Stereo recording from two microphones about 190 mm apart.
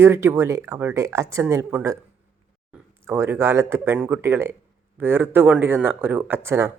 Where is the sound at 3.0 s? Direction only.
10° right (ahead or behind).